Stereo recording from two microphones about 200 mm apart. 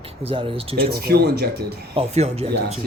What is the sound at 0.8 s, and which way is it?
Speech, 50° right (ahead or behind).